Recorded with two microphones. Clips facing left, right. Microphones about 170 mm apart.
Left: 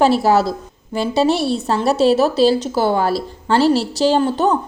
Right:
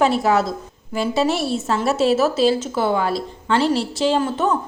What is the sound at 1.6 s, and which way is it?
A woman's voice, 30° left (ahead or behind).